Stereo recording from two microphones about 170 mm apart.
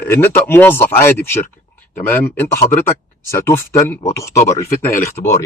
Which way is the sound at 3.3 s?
15° left (ahead or behind).